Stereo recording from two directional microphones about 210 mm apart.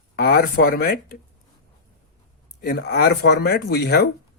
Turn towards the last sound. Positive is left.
turn(degrees=50)  # may be behind; listen again after turning